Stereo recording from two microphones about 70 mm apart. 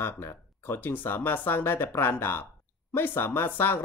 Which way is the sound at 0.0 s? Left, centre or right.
Left.